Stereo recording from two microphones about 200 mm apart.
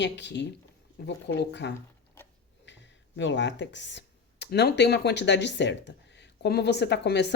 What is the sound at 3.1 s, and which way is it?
Speech, 65° left (ahead or behind).